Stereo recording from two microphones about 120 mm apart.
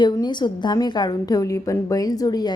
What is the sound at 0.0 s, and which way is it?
A woman's voice, 40° left (ahead or behind).